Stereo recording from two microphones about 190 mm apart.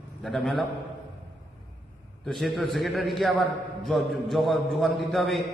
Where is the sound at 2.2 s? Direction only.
Centre (ahead or behind).